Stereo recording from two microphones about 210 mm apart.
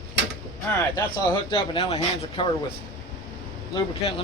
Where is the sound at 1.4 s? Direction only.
25° left (ahead or behind).